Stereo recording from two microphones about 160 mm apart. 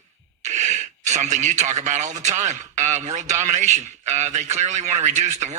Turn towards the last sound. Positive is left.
turn(degrees=-45)  # may be behind; listen again after turning